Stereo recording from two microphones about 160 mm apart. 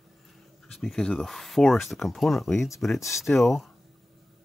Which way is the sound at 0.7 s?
Centre (ahead or behind).